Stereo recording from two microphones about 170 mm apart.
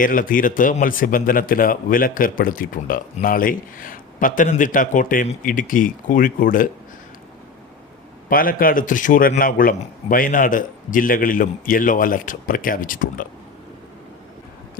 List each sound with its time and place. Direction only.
0.0 s speech: 55° left (ahead or behind)
8.3 s speech: 55° left (ahead or behind)